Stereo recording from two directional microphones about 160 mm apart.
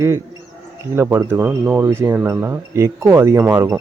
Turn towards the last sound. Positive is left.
turn(degrees=-15)  # may be behind; listen again after turning